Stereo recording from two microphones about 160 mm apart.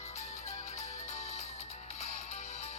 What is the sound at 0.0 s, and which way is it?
Music, 45° left (ahead or behind).